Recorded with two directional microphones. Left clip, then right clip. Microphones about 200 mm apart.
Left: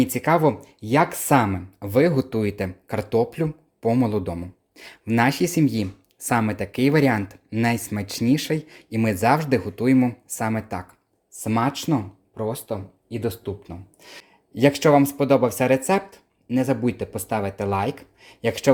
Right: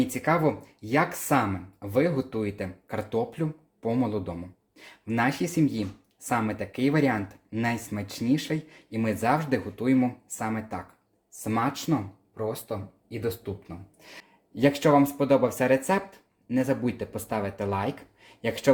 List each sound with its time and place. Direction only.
0.0 s speech: 45° left (ahead or behind)